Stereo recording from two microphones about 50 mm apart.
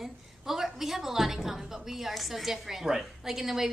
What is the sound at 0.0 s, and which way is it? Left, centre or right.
A woman's voice, centre.